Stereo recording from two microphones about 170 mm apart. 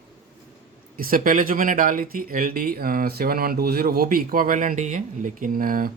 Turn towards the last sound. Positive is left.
turn(degrees=-55)  # may be behind; listen again after turning